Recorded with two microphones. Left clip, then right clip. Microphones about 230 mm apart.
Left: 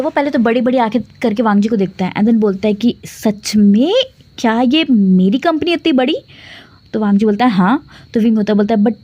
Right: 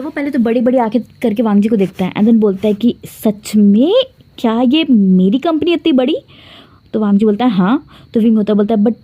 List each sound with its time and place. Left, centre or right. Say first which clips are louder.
0.0 s a woman's voice: left 3 dB; centre
0.9 s a woman's voice: right 1 dB; centre